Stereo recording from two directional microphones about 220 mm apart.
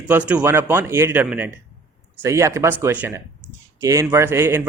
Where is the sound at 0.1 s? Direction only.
5° right (ahead or behind).